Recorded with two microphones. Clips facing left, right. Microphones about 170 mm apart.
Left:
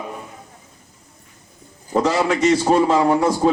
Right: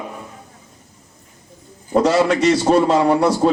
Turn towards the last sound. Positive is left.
turn(degrees=-35)  # may be behind; listen again after turning